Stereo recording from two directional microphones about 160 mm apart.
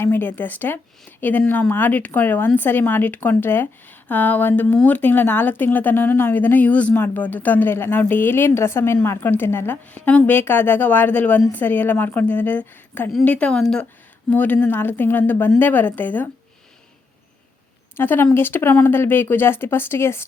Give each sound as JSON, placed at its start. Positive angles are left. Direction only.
{"t": 0.0, "sound": "a woman's voice", "side_deg": 15}
{"t": 17.9, "sound": "a woman's voice", "side_deg": 15}